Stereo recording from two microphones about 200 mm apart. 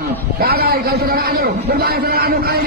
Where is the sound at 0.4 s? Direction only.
50° right (ahead or behind).